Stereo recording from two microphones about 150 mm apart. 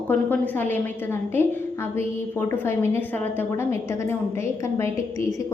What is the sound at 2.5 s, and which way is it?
A woman's voice, 15° left (ahead or behind).